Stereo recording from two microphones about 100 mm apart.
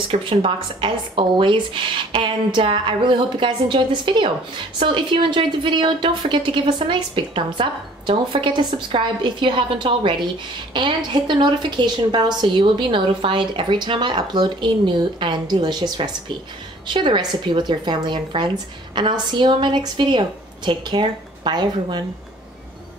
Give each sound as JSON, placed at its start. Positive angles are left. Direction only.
{"t": 0.1, "sound": "a woman's voice", "side_deg": -65}